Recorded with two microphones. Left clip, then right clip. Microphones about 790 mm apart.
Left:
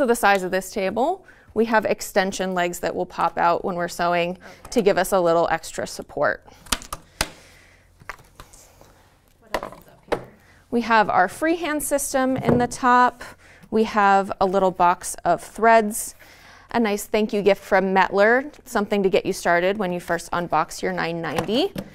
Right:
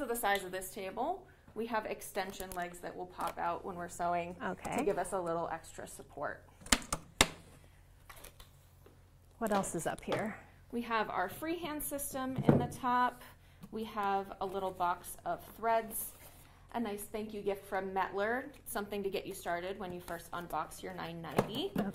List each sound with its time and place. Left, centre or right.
0.0 s a woman's voice: left
10.7 s speech: left
13.7 s a woman's voice: left